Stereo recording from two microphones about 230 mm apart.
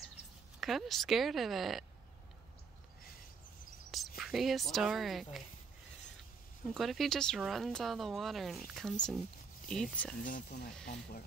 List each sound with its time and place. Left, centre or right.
0.6 s speech: centre
4.2 s speech: centre
6.7 s speech: centre
10.2 s speech: left